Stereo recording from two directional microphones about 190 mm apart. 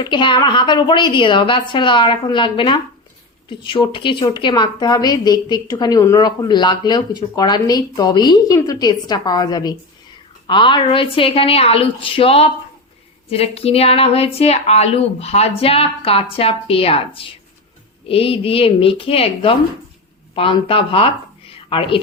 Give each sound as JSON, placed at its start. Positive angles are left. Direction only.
{"t": 0.0, "sound": "a woman's voice", "side_deg": 25}